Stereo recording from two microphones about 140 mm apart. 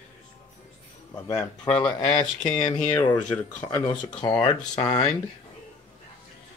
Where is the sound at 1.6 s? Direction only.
30° left (ahead or behind).